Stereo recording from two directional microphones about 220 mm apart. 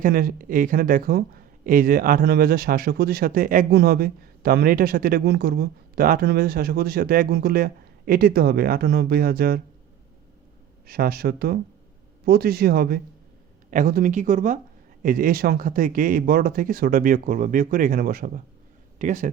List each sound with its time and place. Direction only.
0.0 s speech: 40° right (ahead or behind)
10.8 s speech: 45° right (ahead or behind)